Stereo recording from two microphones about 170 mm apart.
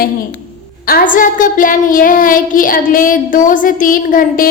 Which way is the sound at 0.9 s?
55° left (ahead or behind).